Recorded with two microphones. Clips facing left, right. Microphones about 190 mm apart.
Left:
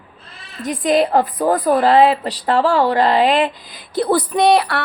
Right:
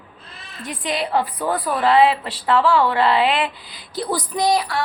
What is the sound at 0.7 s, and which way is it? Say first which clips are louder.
A woman's voice: left 8 dB; 45° left (ahead or behind).